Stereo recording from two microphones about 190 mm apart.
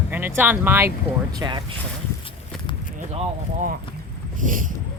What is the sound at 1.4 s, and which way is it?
Speech, 20° right (ahead or behind).